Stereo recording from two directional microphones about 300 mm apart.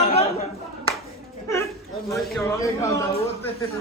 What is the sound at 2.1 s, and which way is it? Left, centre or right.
A man's voice, centre.